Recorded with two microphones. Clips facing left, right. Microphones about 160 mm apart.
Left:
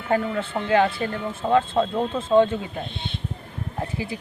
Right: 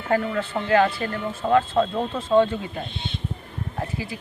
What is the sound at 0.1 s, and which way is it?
Speech, 20° left (ahead or behind).